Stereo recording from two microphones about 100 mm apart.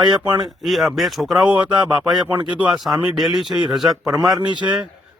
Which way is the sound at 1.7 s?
50° right (ahead or behind).